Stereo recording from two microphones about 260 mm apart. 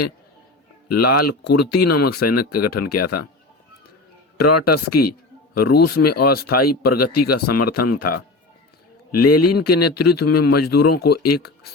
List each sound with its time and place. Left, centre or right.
0.9 s speech: left
4.4 s speech: left